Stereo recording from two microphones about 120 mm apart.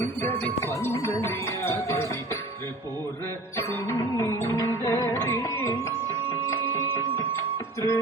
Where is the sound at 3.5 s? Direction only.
25° left (ahead or behind).